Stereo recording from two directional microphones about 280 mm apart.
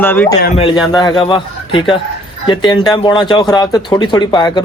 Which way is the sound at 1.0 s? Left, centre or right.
Centre.